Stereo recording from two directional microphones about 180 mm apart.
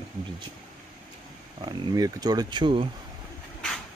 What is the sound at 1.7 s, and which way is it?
Speech, 20° right (ahead or behind).